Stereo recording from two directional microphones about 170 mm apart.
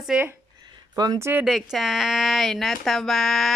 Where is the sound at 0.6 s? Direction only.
25° right (ahead or behind).